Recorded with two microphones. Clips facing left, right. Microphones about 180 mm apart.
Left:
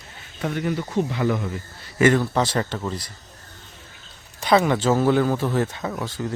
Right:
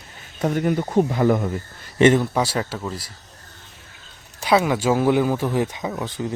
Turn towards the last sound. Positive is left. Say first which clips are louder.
# right 1 dB
turn(degrees=-15)  # may be behind; listen again after turning